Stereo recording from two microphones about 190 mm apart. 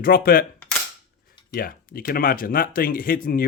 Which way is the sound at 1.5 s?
50° left (ahead or behind).